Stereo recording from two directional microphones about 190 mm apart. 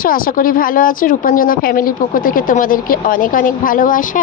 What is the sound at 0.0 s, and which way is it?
Speech, 50° left (ahead or behind).